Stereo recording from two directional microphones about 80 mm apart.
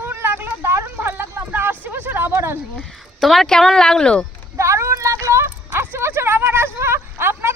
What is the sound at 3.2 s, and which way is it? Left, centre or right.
A woman's voice, centre.